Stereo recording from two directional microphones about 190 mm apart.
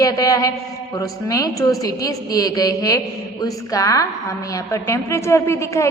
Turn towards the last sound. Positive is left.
turn(degrees=15)  # may be behind; listen again after turning